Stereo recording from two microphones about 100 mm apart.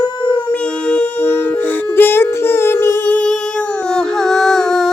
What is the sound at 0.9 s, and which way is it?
Music, 10° left (ahead or behind).